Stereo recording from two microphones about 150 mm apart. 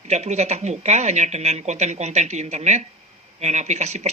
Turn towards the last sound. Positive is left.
turn(degrees=-50)  # may be behind; listen again after turning